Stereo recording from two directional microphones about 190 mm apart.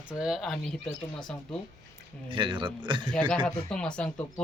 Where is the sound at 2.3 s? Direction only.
25° right (ahead or behind).